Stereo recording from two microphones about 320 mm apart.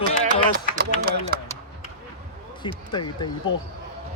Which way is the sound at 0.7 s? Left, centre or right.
Right.